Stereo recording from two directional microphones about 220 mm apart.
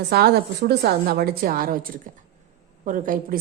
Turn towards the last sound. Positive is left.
turn(degrees=-35)  # may be behind; listen again after turning